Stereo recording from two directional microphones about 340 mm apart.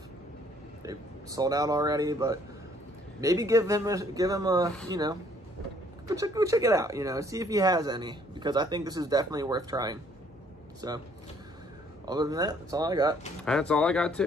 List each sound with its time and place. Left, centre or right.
0.8 s speech: centre
12.1 s speech: centre
13.5 s speech: centre